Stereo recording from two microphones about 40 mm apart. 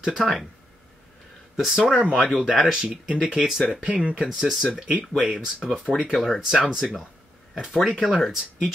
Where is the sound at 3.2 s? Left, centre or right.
Centre.